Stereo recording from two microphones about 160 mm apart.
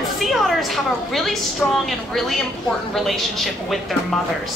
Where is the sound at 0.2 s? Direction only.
Centre (ahead or behind).